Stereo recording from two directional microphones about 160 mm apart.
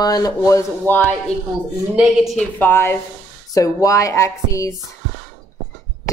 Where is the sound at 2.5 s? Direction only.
15° left (ahead or behind).